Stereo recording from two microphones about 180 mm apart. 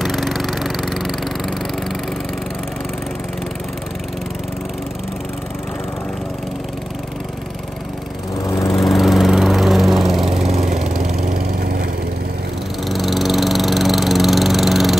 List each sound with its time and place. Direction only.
0.0 s lawn mower: centre (ahead or behind)
8.5 s lawn mower: 15° left (ahead or behind)
8.7 s lawn mower: centre (ahead or behind)
10.3 s lawn mower: 35° right (ahead or behind)
11.6 s lawn mower: 55° right (ahead or behind)
12.8 s lawn mower: centre (ahead or behind)